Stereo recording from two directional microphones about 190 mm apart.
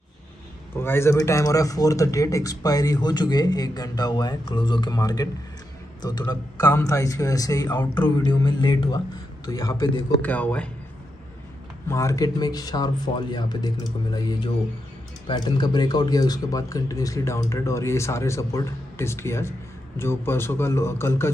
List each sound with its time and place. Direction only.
0.7 s a man's voice: 15° left (ahead or behind)
11.9 s a man's voice: 15° left (ahead or behind)